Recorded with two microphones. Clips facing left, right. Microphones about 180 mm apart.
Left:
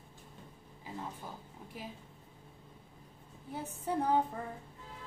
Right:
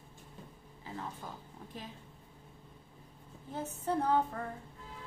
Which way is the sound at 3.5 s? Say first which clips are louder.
Right 2 dB; 10° left (ahead or behind).